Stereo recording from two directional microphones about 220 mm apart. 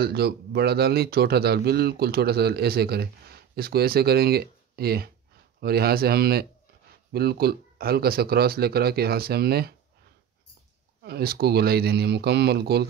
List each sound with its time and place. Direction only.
0.0 s a man's voice: 45° right (ahead or behind)
11.0 s a man's voice: 45° right (ahead or behind)